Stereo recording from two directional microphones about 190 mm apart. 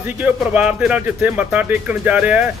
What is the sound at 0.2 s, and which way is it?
Speech, 5° right (ahead or behind).